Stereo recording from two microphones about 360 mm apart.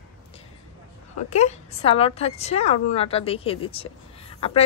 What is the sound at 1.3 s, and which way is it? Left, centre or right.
A woman's voice, centre.